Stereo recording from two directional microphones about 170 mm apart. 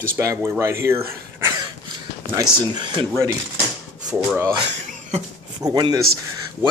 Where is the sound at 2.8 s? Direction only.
25° right (ahead or behind).